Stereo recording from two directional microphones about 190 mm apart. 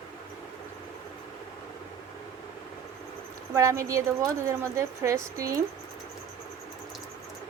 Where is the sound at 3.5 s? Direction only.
15° right (ahead or behind).